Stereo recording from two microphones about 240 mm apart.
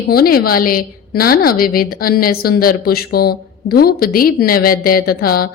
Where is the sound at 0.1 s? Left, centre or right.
Left.